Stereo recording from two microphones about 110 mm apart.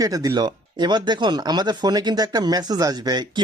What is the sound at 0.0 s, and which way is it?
Speech, 35° right (ahead or behind).